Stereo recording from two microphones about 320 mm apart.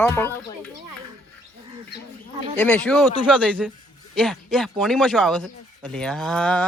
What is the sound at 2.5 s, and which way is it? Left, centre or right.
Speech, centre.